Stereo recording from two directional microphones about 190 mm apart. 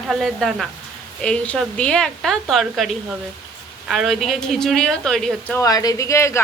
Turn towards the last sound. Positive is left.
turn(degrees=15)  # may be behind; listen again after turning